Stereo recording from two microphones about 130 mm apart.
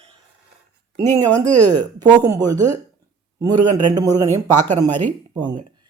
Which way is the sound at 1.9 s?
30° right (ahead or behind).